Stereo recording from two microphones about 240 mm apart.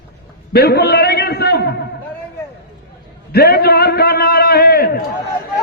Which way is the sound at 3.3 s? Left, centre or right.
Left.